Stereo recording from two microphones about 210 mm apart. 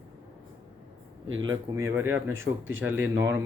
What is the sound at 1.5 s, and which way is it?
Speech, 15° right (ahead or behind).